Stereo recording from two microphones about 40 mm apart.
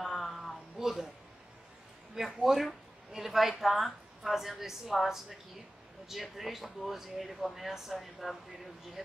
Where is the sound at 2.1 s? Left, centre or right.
Centre.